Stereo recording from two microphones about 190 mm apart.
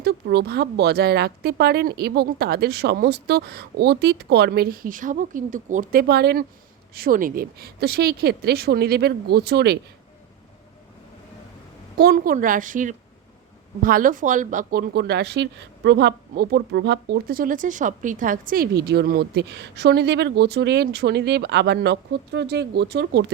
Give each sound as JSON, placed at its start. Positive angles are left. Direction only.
{"t": 0.0, "sound": "speech", "side_deg": -60}
{"t": 11.9, "sound": "a woman's voice", "side_deg": -50}